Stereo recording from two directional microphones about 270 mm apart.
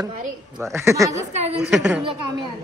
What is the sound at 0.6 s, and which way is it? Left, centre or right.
Speech, centre.